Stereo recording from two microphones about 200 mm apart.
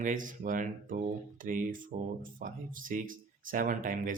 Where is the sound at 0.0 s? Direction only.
40° right (ahead or behind).